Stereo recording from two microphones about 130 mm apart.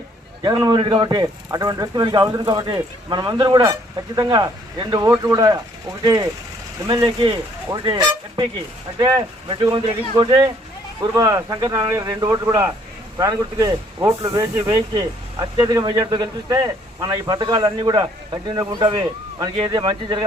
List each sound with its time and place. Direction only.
0.4 s speech: 30° right (ahead or behind)
11.1 s speech: 25° right (ahead or behind)
12.5 s a man's voice: 15° right (ahead or behind)
13.1 s speech: 25° right (ahead or behind)